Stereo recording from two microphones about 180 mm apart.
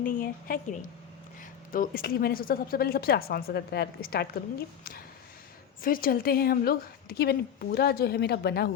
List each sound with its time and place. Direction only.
0.0 s a woman's voice: 50° left (ahead or behind)